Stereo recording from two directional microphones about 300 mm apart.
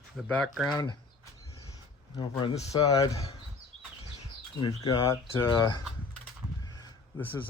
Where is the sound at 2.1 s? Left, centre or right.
Centre.